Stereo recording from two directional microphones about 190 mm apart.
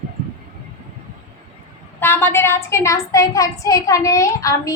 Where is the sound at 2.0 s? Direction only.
10° left (ahead or behind).